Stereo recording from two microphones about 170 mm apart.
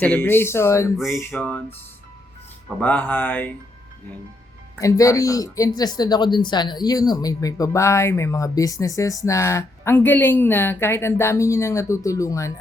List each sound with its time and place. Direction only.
0.0 s speech: 10° left (ahead or behind)
2.8 s speech: 10° left (ahead or behind)
4.8 s speech: 20° left (ahead or behind)